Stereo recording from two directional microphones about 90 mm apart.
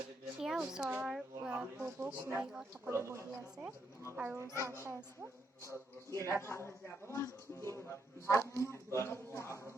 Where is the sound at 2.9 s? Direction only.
30° right (ahead or behind).